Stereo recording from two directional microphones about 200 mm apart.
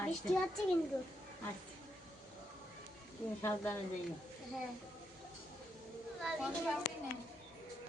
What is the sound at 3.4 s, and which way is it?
Speech, 10° left (ahead or behind).